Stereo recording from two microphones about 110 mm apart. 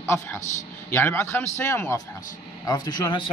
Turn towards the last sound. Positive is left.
turn(degrees=40)  # may be behind; listen again after turning